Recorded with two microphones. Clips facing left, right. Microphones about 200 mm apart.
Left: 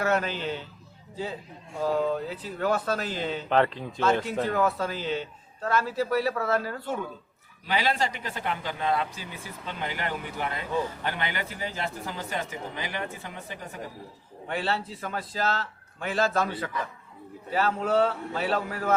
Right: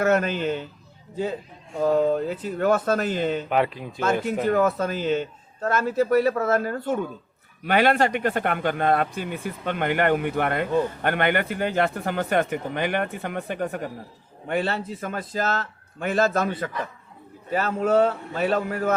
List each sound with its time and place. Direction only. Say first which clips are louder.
0.0 s a man's voice: right 5 dB; 50° right (ahead or behind)
1.8 s a man's voice: right 6 dB; 50° right (ahead or behind)
3.5 s speech: even; 10° right (ahead or behind)
4.4 s a man's voice: right 7 dB; 50° right (ahead or behind); by 13.9 s 65° right (ahead or behind)
14.4 s a man's voice: right 4 dB; 50° right (ahead or behind)